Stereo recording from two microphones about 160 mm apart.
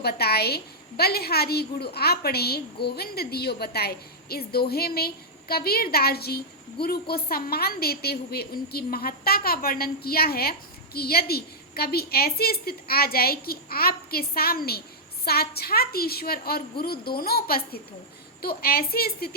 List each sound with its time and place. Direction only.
0.0 s a woman's voice: 80° left